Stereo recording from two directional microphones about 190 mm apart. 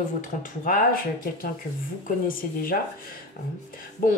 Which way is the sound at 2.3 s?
50° left (ahead or behind).